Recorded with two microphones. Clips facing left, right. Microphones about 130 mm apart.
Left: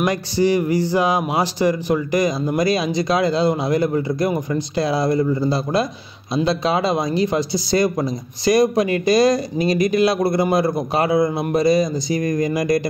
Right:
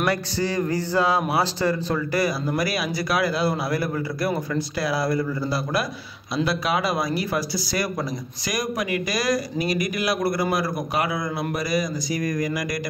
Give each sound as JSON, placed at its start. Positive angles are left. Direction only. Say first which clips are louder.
{"t": 0.0, "sound": "speech", "louder": "left 5 dB", "side_deg": 15}